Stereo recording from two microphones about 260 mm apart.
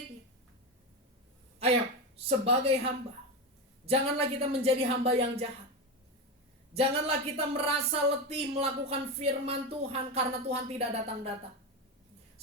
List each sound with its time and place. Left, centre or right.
2.4 s speech: right
6.7 s speech: right